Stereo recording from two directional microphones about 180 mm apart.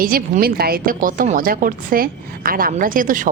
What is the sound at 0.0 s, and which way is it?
Speech, 50° right (ahead or behind).